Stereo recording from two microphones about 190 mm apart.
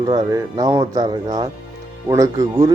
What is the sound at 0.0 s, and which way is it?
Speech, 20° right (ahead or behind).